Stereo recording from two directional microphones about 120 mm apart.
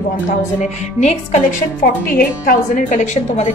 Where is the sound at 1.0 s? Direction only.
75° left (ahead or behind).